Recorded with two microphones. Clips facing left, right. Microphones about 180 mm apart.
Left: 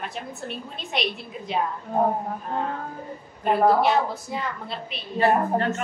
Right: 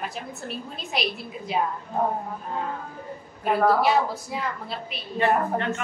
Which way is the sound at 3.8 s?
5° right (ahead or behind).